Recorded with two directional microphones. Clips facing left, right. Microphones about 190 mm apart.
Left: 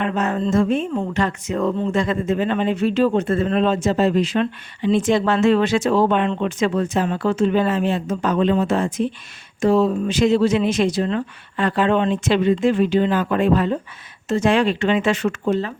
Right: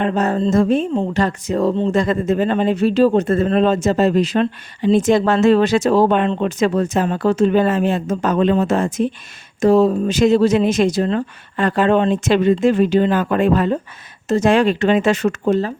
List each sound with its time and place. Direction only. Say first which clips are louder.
0.0 s speech: right 4 dB; 35° right (ahead or behind)